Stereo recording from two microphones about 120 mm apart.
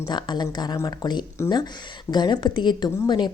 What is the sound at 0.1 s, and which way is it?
A woman's voice, 40° left (ahead or behind).